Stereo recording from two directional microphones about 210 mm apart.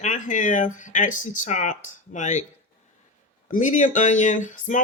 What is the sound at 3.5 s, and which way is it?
A woman's voice, 40° left (ahead or behind).